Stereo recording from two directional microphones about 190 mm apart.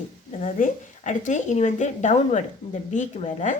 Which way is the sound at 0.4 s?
40° left (ahead or behind).